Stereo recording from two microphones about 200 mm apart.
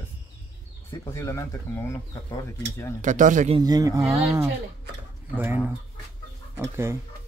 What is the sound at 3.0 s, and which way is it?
Speech, 40° right (ahead or behind).